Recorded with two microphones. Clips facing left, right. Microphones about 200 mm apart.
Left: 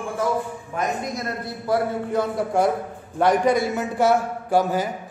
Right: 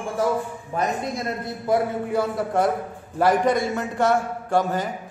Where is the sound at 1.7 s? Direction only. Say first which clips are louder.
Right 1 dB; 20° right (ahead or behind).